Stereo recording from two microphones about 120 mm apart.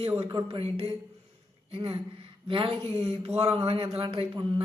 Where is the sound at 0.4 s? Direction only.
50° right (ahead or behind).